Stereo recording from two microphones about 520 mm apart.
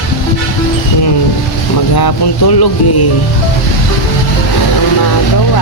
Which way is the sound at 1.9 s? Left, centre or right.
Left.